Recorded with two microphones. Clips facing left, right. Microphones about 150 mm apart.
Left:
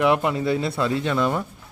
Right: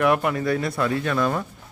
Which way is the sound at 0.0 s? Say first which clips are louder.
Left 1 dB; 20° left (ahead or behind).